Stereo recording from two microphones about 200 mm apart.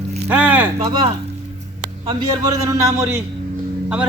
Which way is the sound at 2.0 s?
20° right (ahead or behind).